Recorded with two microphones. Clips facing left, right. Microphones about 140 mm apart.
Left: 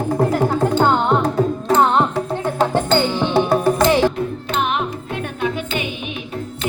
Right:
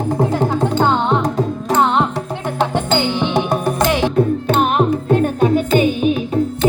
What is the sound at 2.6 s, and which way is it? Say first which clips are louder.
Music: even; 15° right (ahead or behind).